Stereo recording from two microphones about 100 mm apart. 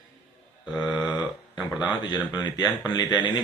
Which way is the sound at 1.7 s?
10° right (ahead or behind).